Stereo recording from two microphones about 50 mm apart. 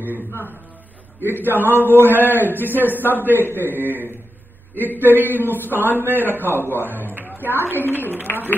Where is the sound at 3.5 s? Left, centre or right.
Right.